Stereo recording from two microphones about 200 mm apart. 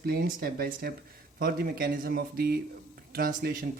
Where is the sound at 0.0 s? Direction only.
50° right (ahead or behind).